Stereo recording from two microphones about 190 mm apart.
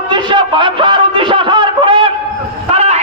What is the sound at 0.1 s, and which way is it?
Snicker, 25° right (ahead or behind).